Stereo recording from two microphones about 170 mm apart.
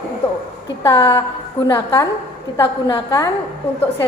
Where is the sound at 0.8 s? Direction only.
15° left (ahead or behind).